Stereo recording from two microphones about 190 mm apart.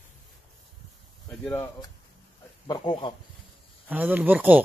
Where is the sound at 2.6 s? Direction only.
20° left (ahead or behind).